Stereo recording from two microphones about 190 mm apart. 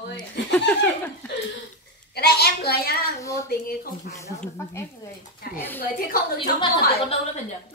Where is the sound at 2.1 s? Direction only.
60° left (ahead or behind).